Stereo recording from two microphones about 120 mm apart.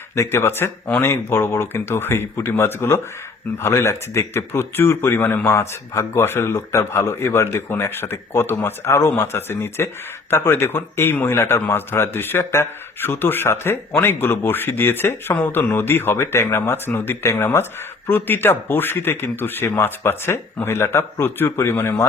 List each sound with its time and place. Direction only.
0.2 s speech: 20° left (ahead or behind)